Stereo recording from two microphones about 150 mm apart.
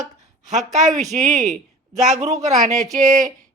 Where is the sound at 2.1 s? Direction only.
50° right (ahead or behind).